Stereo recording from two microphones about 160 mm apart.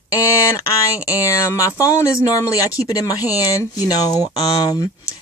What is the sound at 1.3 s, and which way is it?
Speech, 20° left (ahead or behind).